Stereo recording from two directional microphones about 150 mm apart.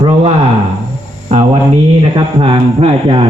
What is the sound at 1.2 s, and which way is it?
Hum, 45° right (ahead or behind).